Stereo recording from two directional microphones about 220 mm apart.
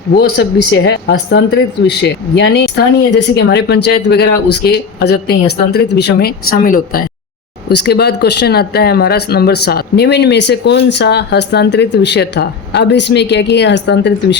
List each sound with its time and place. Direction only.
0.2 s speech: 50° left (ahead or behind)